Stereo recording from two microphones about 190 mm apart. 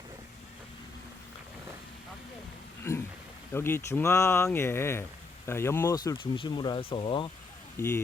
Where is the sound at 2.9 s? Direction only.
15° left (ahead or behind).